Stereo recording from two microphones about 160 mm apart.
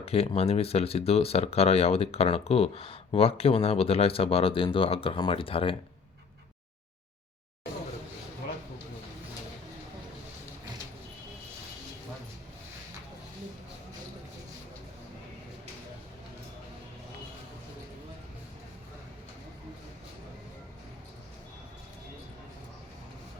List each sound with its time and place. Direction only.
0.0 s speech: 40° left (ahead or behind)